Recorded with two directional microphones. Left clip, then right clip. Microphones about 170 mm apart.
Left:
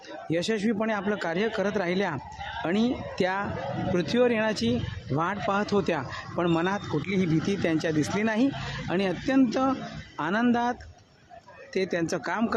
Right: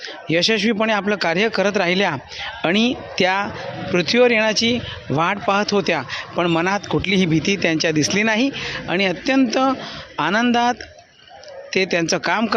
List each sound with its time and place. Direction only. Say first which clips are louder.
0.3 s speech: right 10 dB; 15° right (ahead or behind)
7.5 s speech: right 8 dB; 10° right (ahead or behind)